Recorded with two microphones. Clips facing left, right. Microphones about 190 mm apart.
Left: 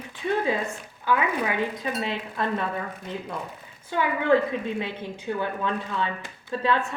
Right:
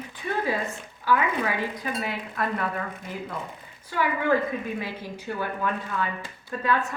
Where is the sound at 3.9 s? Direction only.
25° left (ahead or behind).